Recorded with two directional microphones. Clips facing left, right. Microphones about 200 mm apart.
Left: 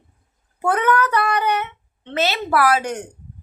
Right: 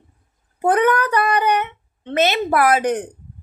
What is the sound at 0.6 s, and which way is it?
A woman's voice, 15° right (ahead or behind).